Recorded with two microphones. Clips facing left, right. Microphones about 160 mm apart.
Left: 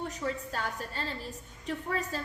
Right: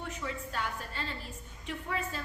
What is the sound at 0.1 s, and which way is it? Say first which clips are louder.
A woman's voice: left 4 dB; 40° left (ahead or behind).